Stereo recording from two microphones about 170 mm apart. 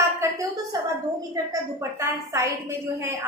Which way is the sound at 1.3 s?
20° right (ahead or behind).